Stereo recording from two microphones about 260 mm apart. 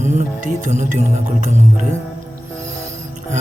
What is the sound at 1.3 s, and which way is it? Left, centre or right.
Music, right.